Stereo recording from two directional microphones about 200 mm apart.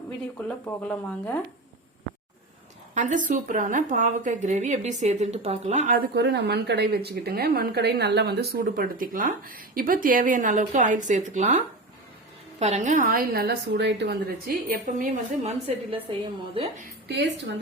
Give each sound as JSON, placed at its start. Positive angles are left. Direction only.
{"t": 0.3, "sound": "speech", "side_deg": 10}
{"t": 2.9, "sound": "a woman's voice", "side_deg": -40}
{"t": 6.1, "sound": "a woman's voice", "side_deg": -60}
{"t": 17.1, "sound": "a woman's voice", "side_deg": -60}